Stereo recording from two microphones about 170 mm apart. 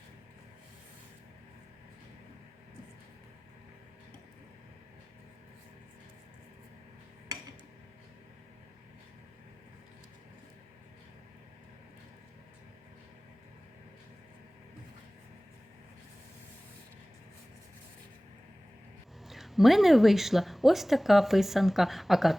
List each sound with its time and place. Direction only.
19.3 s a woman's voice: centre (ahead or behind)